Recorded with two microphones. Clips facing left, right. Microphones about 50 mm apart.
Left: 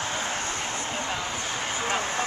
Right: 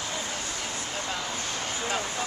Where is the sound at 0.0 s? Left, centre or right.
Left.